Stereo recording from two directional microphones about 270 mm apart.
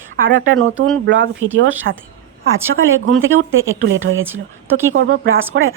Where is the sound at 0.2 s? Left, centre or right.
Right.